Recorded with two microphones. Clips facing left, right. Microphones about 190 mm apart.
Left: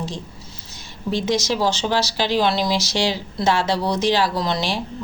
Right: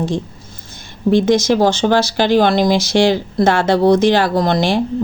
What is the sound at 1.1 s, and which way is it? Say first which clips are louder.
Speech: right 9 dB; 55° right (ahead or behind).